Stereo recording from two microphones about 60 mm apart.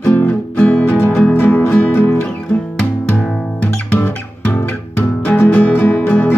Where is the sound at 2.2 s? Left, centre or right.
Centre.